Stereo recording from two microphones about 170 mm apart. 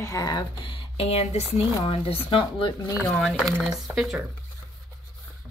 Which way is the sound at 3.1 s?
Centre (ahead or behind).